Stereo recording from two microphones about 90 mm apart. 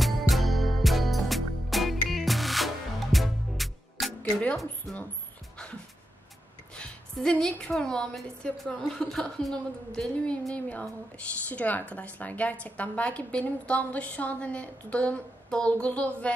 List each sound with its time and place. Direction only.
0.0 s music: centre (ahead or behind)
4.2 s speech: 15° left (ahead or behind)
4.9 s speech: centre (ahead or behind)
6.7 s a woman's voice: 10° left (ahead or behind)